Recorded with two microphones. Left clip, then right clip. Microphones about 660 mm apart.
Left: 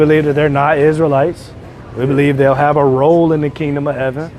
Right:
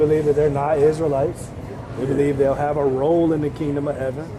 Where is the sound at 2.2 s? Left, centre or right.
Left.